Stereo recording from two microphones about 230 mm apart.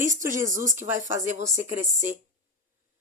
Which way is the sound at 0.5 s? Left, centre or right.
Right.